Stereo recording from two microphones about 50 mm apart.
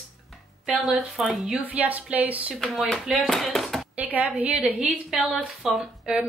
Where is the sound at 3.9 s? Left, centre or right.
Right.